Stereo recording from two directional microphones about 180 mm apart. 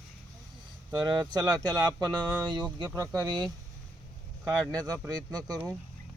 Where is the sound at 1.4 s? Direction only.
20° right (ahead or behind).